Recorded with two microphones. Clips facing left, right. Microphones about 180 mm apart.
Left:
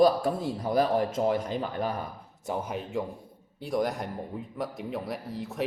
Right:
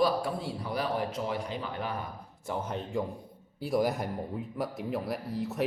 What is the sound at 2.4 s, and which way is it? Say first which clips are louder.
Speech: left 2 dB; 15° left (ahead or behind).